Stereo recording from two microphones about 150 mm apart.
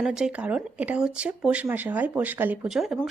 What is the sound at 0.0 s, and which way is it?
Speech, 5° right (ahead or behind).